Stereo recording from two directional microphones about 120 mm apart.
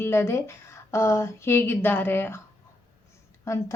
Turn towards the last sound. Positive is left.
turn(degrees=25)  # may be behind; listen again after turning